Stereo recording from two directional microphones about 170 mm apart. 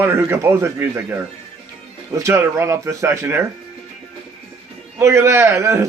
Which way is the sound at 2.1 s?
15° right (ahead or behind).